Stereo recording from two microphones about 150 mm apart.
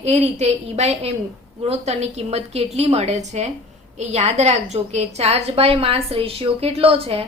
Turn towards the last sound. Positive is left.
turn(degrees=-40)  # may be behind; listen again after turning